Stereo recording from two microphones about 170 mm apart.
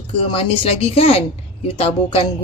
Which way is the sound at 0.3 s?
35° left (ahead or behind).